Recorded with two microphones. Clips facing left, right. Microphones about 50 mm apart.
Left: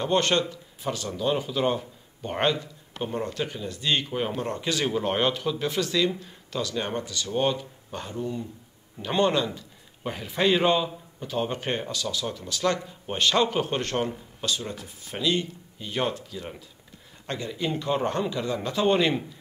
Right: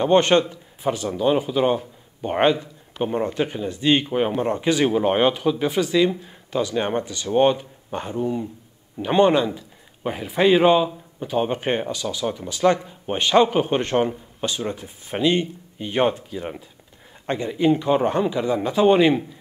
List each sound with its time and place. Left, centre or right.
0.0 s a man's voice: right